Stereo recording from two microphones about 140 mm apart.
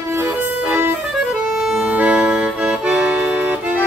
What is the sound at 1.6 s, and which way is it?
Accordion, centre (ahead or behind).